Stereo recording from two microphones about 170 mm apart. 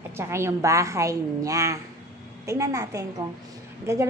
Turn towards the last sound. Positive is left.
turn(degrees=-15)  # may be behind; listen again after turning